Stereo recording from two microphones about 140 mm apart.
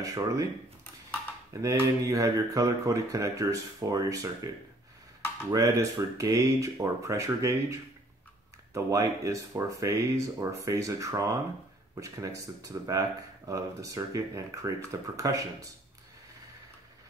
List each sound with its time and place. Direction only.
0.0 s speech: 25° right (ahead or behind)
1.5 s speech: 25° right (ahead or behind)
5.5 s speech: 20° right (ahead or behind)